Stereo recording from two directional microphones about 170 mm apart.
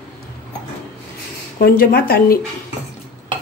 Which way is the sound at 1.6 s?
60° left (ahead or behind).